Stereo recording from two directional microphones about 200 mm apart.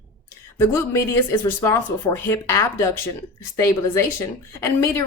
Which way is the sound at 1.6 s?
15° left (ahead or behind).